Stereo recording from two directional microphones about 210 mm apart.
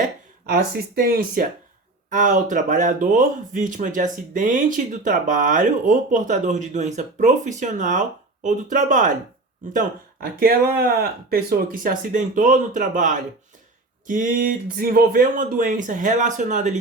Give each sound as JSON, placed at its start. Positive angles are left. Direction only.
{"t": 0.4, "sound": "speech", "side_deg": -45}